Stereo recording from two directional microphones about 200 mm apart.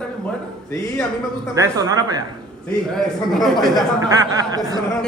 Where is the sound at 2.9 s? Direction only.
Centre (ahead or behind).